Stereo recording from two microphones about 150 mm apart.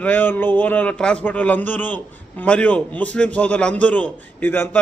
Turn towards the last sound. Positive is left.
turn(degrees=15)  # may be behind; listen again after turning